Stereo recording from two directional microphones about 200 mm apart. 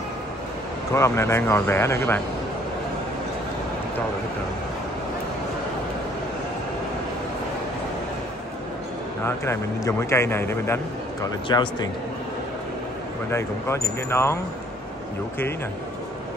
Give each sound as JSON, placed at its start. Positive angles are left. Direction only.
{"t": 0.9, "sound": "speech", "side_deg": 15}
{"t": 9.2, "sound": "speech", "side_deg": 15}
{"t": 13.3, "sound": "speech", "side_deg": 15}